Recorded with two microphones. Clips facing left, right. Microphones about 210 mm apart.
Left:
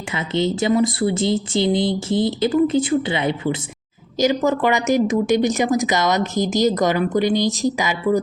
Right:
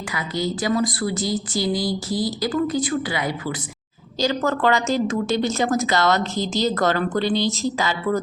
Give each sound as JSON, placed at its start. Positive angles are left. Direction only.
{"t": 0.1, "sound": "a woman's voice", "side_deg": 25}